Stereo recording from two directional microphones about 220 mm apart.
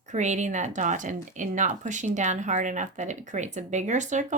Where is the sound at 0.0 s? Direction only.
35° right (ahead or behind).